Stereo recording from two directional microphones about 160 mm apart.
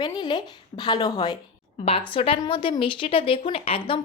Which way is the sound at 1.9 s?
35° left (ahead or behind).